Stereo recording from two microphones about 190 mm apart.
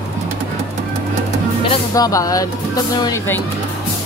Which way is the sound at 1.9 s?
15° left (ahead or behind).